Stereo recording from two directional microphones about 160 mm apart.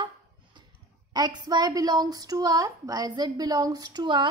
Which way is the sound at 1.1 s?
25° right (ahead or behind).